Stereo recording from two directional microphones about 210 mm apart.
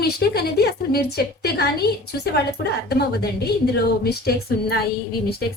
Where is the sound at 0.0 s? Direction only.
50° left (ahead or behind).